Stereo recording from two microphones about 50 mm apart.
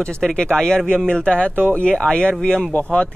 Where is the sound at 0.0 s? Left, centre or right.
Centre.